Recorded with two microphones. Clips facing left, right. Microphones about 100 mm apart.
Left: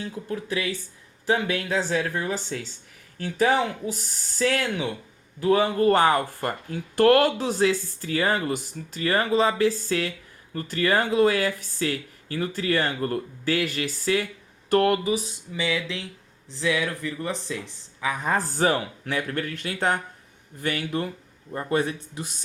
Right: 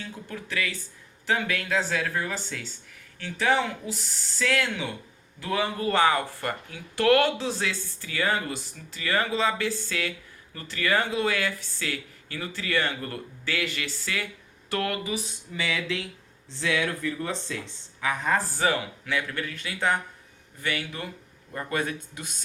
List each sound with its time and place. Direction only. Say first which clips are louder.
0.0 s speech: left 6 dB; 35° left (ahead or behind)
15.5 s speech: left 2 dB; 20° left (ahead or behind)
18.5 s speech: left 3 dB; 45° left (ahead or behind)
21.5 s speech: left 4 dB; 30° left (ahead or behind)